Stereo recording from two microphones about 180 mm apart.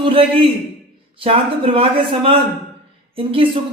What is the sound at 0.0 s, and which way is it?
A man's voice, 30° right (ahead or behind).